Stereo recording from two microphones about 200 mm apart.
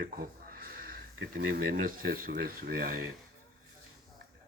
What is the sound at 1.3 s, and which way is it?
Speech, 45° right (ahead or behind).